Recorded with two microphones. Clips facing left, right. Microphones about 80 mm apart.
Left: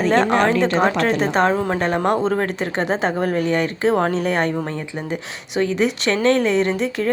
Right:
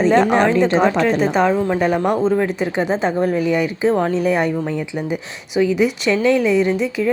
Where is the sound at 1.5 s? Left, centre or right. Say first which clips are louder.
Right 2 dB; centre.